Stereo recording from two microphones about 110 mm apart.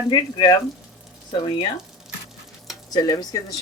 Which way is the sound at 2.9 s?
35° left (ahead or behind).